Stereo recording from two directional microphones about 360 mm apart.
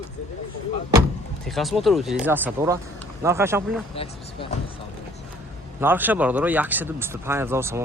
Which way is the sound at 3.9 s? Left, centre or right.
Centre.